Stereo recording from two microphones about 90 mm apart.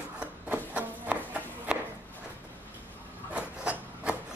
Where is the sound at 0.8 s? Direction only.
15° right (ahead or behind).